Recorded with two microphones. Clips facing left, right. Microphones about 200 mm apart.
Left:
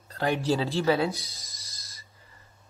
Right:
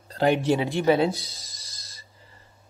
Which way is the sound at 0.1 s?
25° right (ahead or behind).